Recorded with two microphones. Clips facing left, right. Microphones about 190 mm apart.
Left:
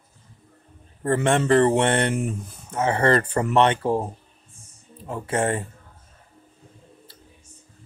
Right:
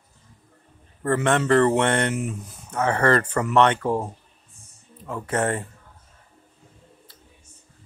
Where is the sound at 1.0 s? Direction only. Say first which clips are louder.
Left 1 dB; 30° left (ahead or behind).